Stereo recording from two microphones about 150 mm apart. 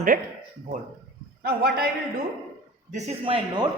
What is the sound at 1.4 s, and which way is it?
Speech, 90° right.